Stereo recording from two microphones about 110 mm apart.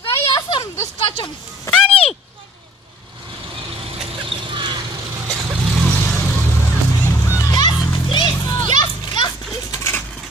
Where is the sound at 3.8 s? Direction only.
55° right (ahead or behind).